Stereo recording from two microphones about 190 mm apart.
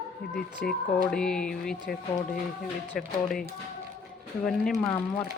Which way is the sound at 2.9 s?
Centre (ahead or behind).